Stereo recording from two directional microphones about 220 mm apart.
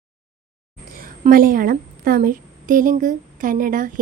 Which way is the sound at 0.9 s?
40° right (ahead or behind).